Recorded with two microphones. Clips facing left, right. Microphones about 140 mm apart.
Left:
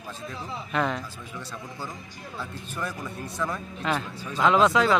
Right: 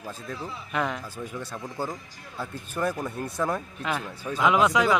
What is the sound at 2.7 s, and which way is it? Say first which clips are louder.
Speech: right 6 dB; 50° right (ahead or behind).